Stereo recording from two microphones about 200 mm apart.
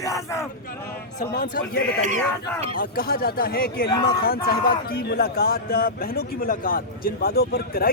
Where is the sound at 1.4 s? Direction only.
45° left (ahead or behind).